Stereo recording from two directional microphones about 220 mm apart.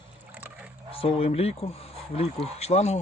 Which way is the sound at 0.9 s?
25° left (ahead or behind).